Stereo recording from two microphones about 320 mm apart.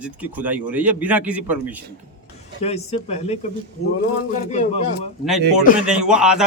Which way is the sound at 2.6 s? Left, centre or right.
Centre.